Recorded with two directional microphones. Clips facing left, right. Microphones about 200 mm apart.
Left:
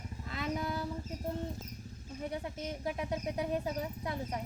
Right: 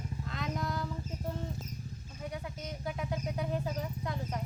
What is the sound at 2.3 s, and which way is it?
Speech, 30° left (ahead or behind).